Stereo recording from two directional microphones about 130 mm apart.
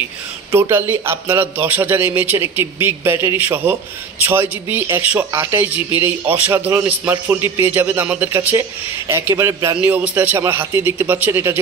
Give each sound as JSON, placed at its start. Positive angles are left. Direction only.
{"t": 0.5, "sound": "a man's voice", "side_deg": -20}